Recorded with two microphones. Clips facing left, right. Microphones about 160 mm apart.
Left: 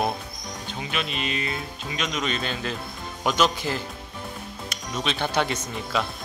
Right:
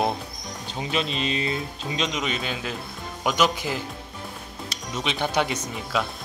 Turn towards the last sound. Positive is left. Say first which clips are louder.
# even
turn(degrees=-10)  # may be behind; listen again after turning